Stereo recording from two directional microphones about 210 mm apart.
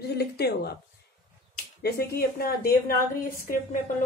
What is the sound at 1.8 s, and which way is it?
Speech, 50° left (ahead or behind).